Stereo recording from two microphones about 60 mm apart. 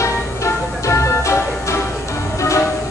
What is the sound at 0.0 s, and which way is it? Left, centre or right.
Music, left.